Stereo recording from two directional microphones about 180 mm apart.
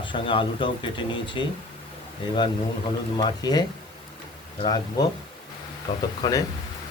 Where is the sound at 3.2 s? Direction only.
25° left (ahead or behind).